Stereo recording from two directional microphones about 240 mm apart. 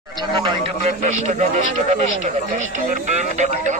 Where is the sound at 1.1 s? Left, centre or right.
Right.